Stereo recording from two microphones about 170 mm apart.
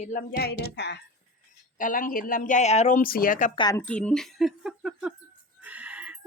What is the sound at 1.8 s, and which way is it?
Speech, 50° left (ahead or behind).